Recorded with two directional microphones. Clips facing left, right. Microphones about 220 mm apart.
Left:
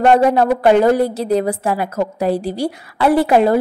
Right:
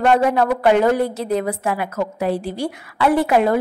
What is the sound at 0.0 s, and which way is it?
A woman's voice, 35° left (ahead or behind).